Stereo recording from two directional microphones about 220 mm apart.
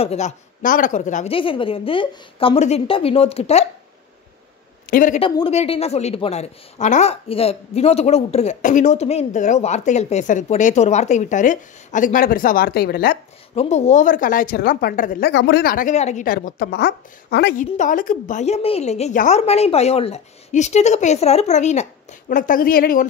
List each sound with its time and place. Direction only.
0.0 s speech: 30° left (ahead or behind)
4.8 s speech: 35° left (ahead or behind)
5.2 s a woman's voice: 25° left (ahead or behind); by 13.2 s 45° left (ahead or behind)
13.6 s a woman's voice: 30° left (ahead or behind); by 17.6 s 45° left (ahead or behind)
17.6 s a woman's voice: 35° left (ahead or behind)